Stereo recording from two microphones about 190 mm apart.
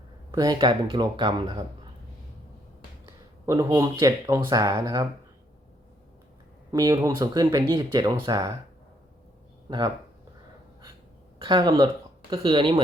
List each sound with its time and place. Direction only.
0.3 s speech: 20° right (ahead or behind)
3.4 s speech: 15° right (ahead or behind)
6.7 s speech: 20° right (ahead or behind)
9.6 s speech: 25° right (ahead or behind)
11.3 s speech: 25° right (ahead or behind)